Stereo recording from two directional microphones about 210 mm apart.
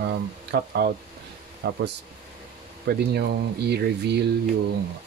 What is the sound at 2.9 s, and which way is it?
Speech, 50° right (ahead or behind).